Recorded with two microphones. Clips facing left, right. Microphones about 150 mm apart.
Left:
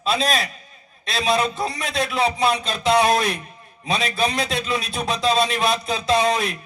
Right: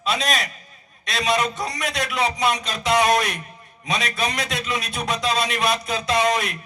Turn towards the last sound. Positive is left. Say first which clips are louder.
# left 1 dB
turn(degrees=30)  # may be behind; listen again after turning